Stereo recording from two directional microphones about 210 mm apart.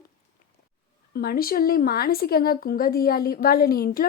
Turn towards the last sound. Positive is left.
turn(degrees=45)  # may be behind; listen again after turning